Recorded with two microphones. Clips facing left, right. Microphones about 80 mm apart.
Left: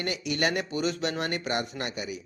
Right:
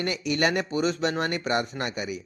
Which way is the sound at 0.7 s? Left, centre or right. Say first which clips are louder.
Right 3 dB; right.